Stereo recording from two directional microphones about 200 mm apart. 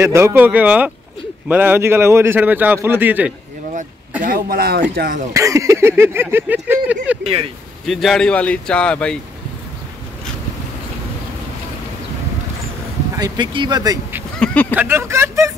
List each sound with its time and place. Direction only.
0.0 s a man's voice: 10° right (ahead or behind)
4.2 s speech: 45° right (ahead or behind)
5.3 s a man's voice: 15° right (ahead or behind)
7.2 s speech: 30° right (ahead or behind)
7.8 s speech: centre (ahead or behind)
13.2 s speech: 25° right (ahead or behind)
14.4 s a sound: 5° left (ahead or behind)
14.7 s a man's voice: 10° right (ahead or behind)